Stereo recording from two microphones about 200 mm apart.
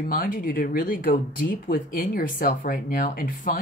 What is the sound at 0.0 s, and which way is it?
Speech, 45° left (ahead or behind).